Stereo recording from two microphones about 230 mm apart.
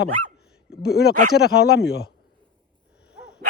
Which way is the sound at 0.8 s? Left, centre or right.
Left.